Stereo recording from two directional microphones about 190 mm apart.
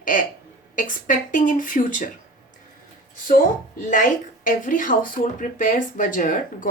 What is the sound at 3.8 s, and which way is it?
Speech, 45° left (ahead or behind).